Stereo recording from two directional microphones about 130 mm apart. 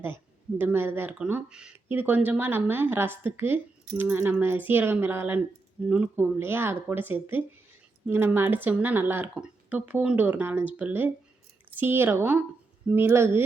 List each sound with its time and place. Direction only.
0.6 s speech: 15° right (ahead or behind)